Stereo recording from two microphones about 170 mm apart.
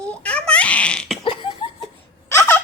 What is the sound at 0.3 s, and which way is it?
Laughter, 5° left (ahead or behind).